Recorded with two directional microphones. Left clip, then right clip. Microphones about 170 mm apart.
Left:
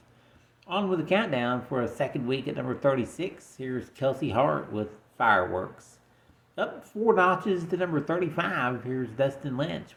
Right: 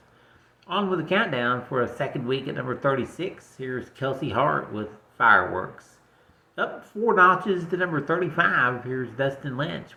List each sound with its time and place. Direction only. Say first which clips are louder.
0.7 s speech: right 2 dB; 35° left (ahead or behind)